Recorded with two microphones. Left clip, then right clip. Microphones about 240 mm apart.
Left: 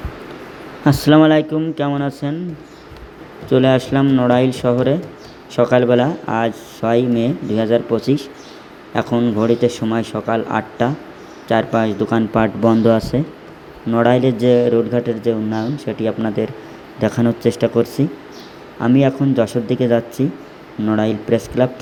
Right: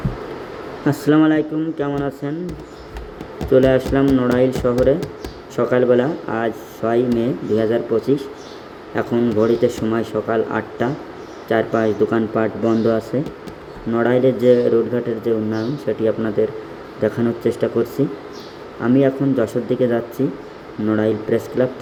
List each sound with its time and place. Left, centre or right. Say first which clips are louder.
0.9 s speech: left 4 dB; left
3.5 s speech: even; centre